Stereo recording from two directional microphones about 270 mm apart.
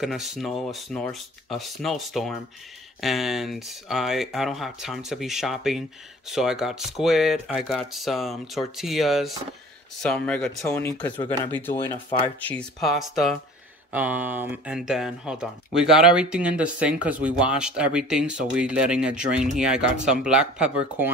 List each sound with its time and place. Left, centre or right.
0.0 s speech: centre
12.4 s speech: centre